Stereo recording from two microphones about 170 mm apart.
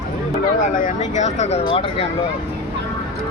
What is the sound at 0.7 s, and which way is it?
Speech, 50° left (ahead or behind).